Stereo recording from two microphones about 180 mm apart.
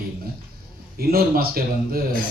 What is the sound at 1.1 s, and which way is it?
Speech, 55° right (ahead or behind).